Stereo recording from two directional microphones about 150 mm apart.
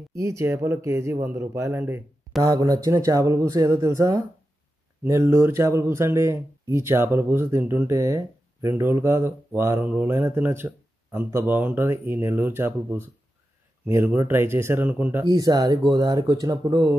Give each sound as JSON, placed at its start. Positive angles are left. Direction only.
{"t": 0.1, "sound": "speech", "side_deg": -20}
{"t": 15.2, "sound": "speech", "side_deg": -25}